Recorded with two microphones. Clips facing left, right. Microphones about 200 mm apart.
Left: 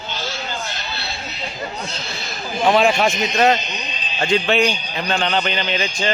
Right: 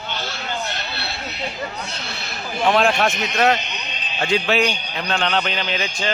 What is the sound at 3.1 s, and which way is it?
Speech, 60° right (ahead or behind).